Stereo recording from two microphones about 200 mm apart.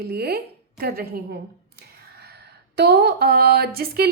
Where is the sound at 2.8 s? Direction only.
55° right (ahead or behind).